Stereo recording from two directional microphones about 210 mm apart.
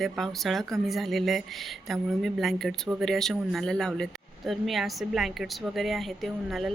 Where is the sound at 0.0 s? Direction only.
Centre (ahead or behind).